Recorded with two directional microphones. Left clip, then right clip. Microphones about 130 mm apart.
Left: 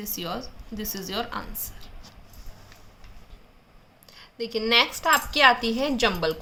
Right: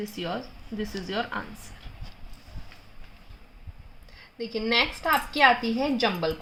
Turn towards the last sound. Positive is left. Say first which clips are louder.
# left 2 dB
turn(degrees=-5)  # may be behind; listen again after turning